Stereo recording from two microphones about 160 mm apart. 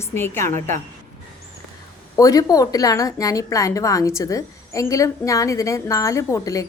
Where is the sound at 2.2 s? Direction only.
20° left (ahead or behind).